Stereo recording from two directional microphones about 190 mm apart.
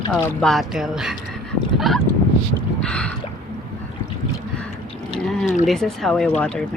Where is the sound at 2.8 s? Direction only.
5° left (ahead or behind).